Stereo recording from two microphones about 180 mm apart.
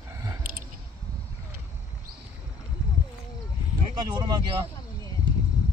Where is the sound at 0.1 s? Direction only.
20° right (ahead or behind).